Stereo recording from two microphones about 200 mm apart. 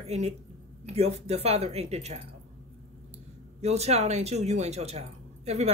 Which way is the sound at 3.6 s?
35° right (ahead or behind).